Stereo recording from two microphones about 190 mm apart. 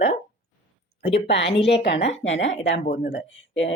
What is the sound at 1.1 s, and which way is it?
Speech, 65° left (ahead or behind).